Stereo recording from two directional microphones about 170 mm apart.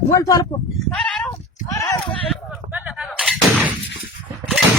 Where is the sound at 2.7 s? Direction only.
5° right (ahead or behind).